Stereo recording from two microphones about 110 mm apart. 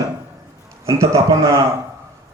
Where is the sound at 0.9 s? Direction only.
30° right (ahead or behind).